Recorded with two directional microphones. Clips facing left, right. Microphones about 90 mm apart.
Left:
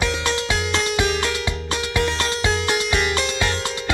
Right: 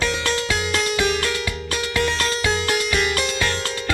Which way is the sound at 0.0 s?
20° left (ahead or behind).